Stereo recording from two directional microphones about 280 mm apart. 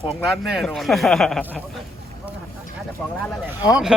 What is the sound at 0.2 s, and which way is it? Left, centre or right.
Speech, centre.